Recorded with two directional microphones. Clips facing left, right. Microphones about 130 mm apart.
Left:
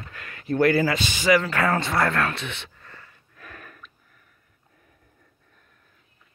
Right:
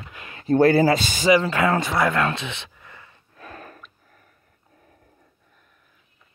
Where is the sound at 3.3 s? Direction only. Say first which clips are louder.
Right 5 dB; 30° right (ahead or behind).